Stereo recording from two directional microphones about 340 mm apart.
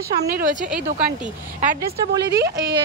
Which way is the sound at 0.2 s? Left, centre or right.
Right.